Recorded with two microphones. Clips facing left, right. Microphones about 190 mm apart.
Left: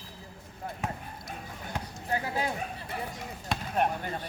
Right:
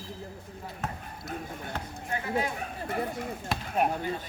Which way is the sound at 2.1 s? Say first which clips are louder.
Left 3 dB; 35° left (ahead or behind).